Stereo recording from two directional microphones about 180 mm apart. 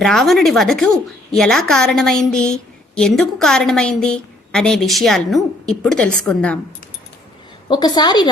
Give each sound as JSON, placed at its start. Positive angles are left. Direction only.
{"t": 0.0, "sound": "a woman's voice", "side_deg": 0}
{"t": 7.7, "sound": "a woman's voice", "side_deg": 20}